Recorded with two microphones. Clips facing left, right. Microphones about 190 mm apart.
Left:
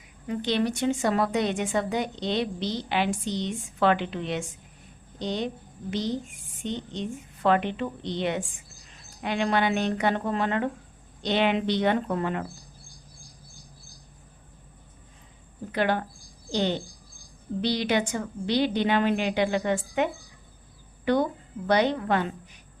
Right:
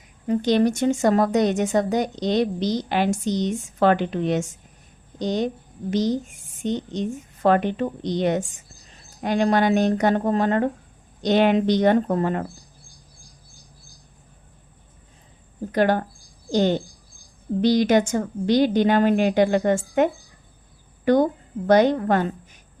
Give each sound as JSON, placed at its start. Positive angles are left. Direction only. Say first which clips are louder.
{"t": 0.3, "sound": "speech", "louder": "right 7 dB", "side_deg": -45}
{"t": 15.7, "sound": "speech", "louder": "right 6 dB", "side_deg": -45}